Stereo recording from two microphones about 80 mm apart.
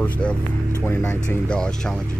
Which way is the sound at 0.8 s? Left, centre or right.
Left.